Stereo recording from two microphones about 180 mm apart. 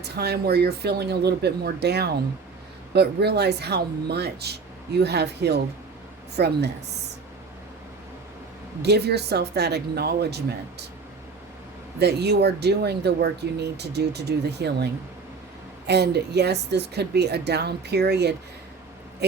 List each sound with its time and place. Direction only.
0.0 s a woman's voice: 65° right (ahead or behind)
8.8 s speech: 65° right (ahead or behind)
11.9 s speech: 65° right (ahead or behind)
15.9 s a woman's voice: 65° right (ahead or behind)